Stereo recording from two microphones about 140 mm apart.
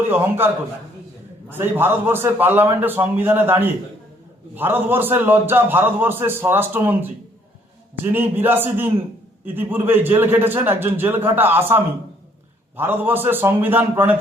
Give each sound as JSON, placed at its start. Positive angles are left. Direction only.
{"t": 0.1, "sound": "a man's voice", "side_deg": -15}